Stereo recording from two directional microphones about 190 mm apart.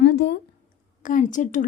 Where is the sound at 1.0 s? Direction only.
40° left (ahead or behind).